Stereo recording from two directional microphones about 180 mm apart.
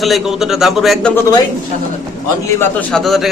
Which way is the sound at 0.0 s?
Centre (ahead or behind).